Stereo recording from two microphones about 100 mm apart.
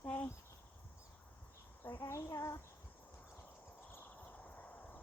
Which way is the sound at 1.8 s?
25° left (ahead or behind).